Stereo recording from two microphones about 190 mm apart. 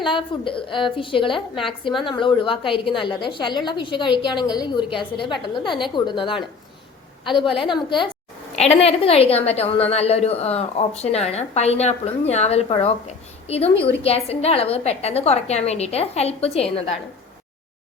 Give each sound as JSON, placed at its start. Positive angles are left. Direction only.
{"t": 0.1, "sound": "a woman's voice", "side_deg": 25}
{"t": 7.6, "sound": "a woman's voice", "side_deg": 25}